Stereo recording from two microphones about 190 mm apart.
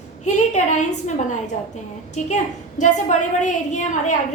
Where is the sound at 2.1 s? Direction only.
40° left (ahead or behind).